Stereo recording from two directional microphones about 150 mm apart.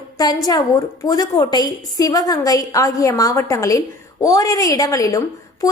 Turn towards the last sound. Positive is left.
turn(degrees=20)  # may be behind; listen again after turning